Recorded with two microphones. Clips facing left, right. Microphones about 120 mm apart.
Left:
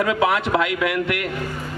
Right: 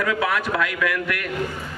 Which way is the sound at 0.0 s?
25° left (ahead or behind).